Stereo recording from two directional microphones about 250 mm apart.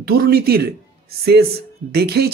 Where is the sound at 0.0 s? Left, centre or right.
Right.